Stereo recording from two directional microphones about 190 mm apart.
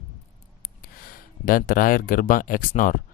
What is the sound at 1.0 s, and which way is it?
Speech, 50° left (ahead or behind).